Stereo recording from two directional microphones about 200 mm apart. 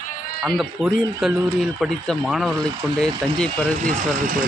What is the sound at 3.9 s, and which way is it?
Speech, 40° right (ahead or behind).